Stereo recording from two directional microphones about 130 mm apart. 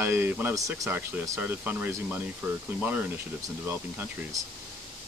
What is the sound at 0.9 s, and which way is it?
Speech, 15° right (ahead or behind).